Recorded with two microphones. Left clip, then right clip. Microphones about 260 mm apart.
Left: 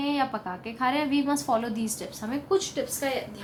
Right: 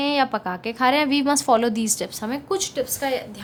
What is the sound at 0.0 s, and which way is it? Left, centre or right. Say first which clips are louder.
A woman's voice: right 6 dB; right.